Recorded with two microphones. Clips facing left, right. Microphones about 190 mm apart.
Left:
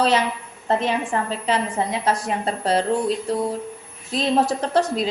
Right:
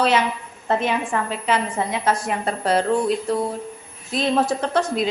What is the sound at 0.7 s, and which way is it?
A woman's voice, 35° left (ahead or behind).